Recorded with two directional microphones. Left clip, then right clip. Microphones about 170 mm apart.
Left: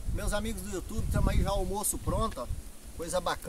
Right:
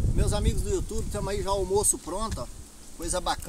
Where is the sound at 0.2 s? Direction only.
15° left (ahead or behind).